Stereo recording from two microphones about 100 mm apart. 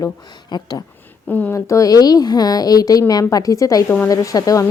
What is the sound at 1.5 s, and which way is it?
Speech, 30° left (ahead or behind).